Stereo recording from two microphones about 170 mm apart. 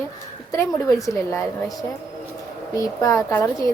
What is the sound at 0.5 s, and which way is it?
A woman's voice, 20° left (ahead or behind).